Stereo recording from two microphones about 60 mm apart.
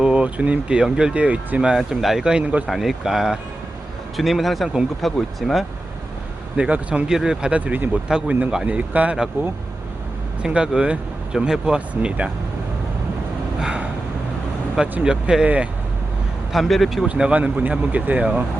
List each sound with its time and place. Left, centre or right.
0.0 s a sound: centre
0.8 s speech: centre
1.7 s speech: centre
2.3 s speech: right
2.6 s speech: centre
6.6 s speech: right
7.1 s speech: centre
7.6 s speech: right
10.4 s speech: centre
13.6 s speech: centre
15.0 s speech: centre
16.5 s speech: centre
17.1 s speech: centre